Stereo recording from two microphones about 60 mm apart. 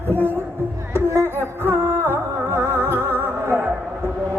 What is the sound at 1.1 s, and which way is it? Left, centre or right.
Music, right.